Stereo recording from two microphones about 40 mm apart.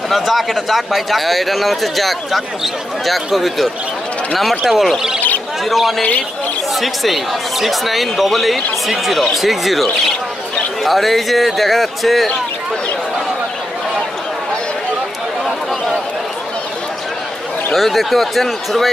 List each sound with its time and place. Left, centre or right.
0.1 s speech: centre
5.7 s speech: centre
17.7 s speech: centre